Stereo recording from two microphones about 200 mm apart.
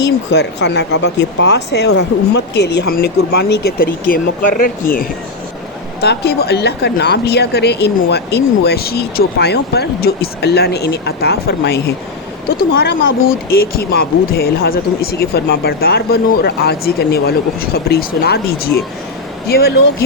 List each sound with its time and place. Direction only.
0.0 s speech: 60° left (ahead or behind)